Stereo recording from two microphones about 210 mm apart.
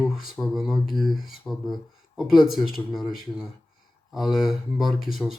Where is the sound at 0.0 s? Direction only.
Centre (ahead or behind).